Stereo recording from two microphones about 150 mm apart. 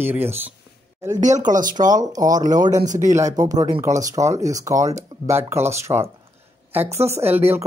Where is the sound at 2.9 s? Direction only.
55° right (ahead or behind).